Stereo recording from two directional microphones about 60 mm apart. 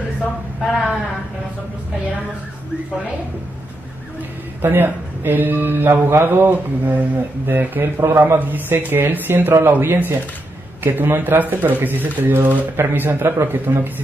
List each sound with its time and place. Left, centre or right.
4.6 s speech: right